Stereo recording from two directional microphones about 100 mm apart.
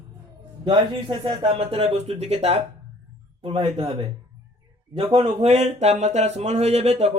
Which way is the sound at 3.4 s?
80° right.